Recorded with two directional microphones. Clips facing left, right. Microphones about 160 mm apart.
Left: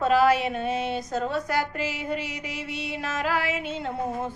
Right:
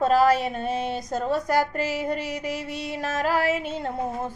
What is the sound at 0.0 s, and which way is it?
Speech, 40° right (ahead or behind).